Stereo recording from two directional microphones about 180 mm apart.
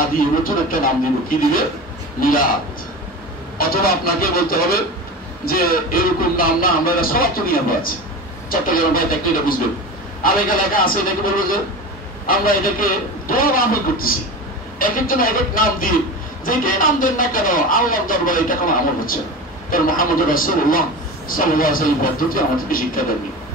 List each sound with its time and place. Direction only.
0.2 s speech: 50° left (ahead or behind)
3.5 s speech: 55° left (ahead or behind)
10.2 s speech: 50° left (ahead or behind)